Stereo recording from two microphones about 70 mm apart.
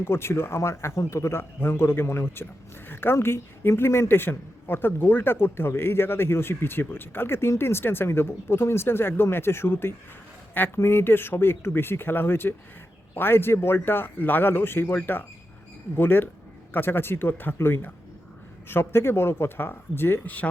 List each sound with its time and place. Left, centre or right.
0.0 s a man's voice: left